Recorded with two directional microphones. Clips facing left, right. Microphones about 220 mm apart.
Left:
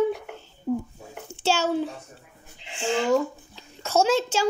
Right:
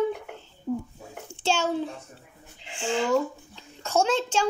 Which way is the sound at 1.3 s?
5° left (ahead or behind).